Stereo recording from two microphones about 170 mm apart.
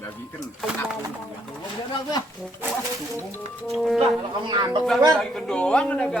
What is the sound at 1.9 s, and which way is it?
Speech, 25° left (ahead or behind).